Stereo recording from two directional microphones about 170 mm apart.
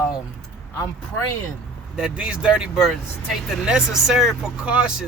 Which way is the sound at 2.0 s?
5° right (ahead or behind).